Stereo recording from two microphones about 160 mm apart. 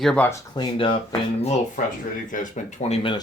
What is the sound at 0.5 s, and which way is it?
Speech, 30° left (ahead or behind).